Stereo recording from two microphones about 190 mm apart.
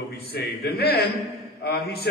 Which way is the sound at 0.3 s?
55° left (ahead or behind).